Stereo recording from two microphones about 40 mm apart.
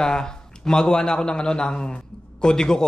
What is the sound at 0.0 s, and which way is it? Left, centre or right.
A man's voice, centre.